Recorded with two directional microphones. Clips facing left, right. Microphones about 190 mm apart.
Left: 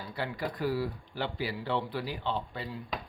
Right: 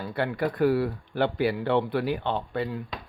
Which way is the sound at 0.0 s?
60° right (ahead or behind).